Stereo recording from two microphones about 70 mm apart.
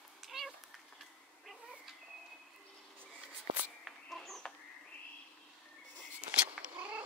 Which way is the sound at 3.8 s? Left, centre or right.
Centre.